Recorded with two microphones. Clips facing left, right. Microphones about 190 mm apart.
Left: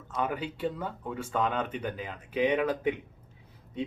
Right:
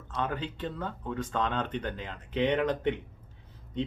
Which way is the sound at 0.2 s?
10° left (ahead or behind).